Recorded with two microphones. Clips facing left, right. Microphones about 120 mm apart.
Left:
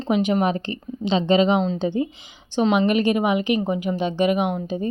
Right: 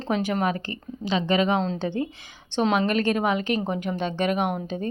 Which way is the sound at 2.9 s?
15° left (ahead or behind).